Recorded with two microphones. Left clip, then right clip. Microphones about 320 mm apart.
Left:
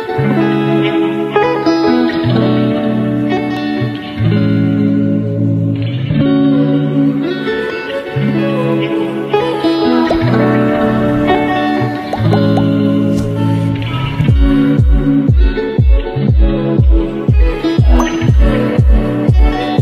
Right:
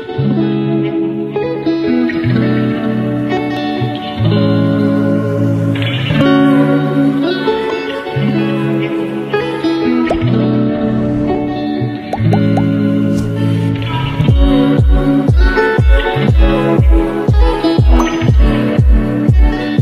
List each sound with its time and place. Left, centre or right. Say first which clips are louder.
0.2 s music: left 2 dB; left
1.9 s music: left 2 dB; centre
4.3 s music: right 2 dB; centre
6.1 s music: right 2 dB; right
8.2 s music: left 2 dB; centre
9.9 s music: left 2 dB; centre
10.5 s music: left 3 dB; left
12.3 s music: left 2 dB; centre
14.2 s music: right 1 dB; centre
16.2 s music: right 3 dB; right